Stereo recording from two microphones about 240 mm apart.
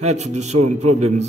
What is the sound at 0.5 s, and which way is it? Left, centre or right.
Speech, right.